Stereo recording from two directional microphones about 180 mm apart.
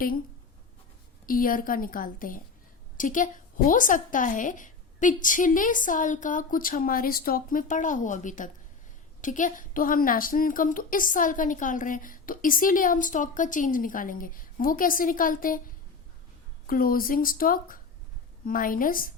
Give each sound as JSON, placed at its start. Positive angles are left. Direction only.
{"t": 1.3, "sound": "a woman's voice", "side_deg": 50}
{"t": 16.6, "sound": "a woman's voice", "side_deg": 50}